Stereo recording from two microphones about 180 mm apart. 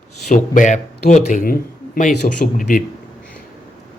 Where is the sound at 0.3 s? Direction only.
45° left (ahead or behind).